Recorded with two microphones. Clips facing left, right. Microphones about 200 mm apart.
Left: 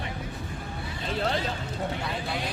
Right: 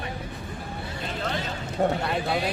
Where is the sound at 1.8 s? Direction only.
60° right (ahead or behind).